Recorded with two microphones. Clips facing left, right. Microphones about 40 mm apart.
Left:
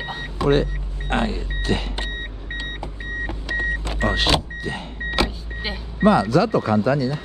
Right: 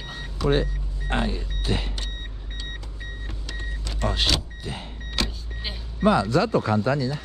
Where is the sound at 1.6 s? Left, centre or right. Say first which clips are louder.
Left 4 dB; centre.